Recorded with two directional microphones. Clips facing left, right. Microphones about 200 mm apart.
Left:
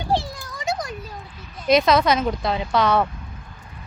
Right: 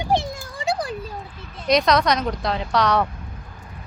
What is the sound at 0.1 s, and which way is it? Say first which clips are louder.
Children playing: right 1 dB; 20° right (ahead or behind).